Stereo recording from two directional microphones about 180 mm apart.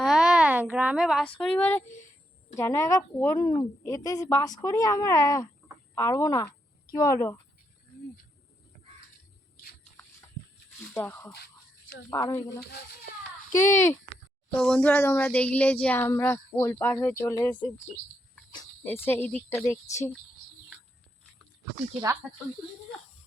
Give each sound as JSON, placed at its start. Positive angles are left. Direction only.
{"t": 0.0, "sound": "a sound", "side_deg": 0}
{"t": 2.6, "sound": "a woman's voice", "side_deg": 15}
{"t": 10.9, "sound": "a woman's voice", "side_deg": 10}
{"t": 13.6, "sound": "speech", "side_deg": 40}
{"t": 14.6, "sound": "speech", "side_deg": 5}
{"t": 18.8, "sound": "speech", "side_deg": 10}